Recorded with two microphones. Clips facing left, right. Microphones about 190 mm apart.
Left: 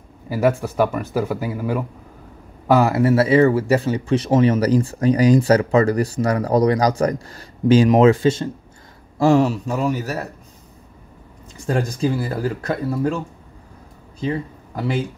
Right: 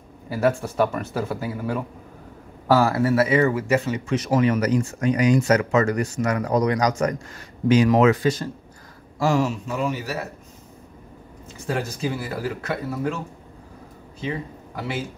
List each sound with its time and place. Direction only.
0.4 s speech: 15° left (ahead or behind); by 10.1 s 40° left (ahead or behind)
11.7 s speech: 35° left (ahead or behind)